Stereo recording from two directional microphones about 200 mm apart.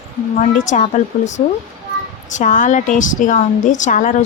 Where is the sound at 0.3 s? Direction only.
40° left (ahead or behind).